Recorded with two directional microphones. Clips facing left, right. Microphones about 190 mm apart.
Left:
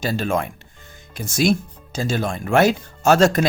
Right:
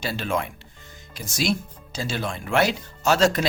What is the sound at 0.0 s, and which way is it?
Speech, 45° left (ahead or behind).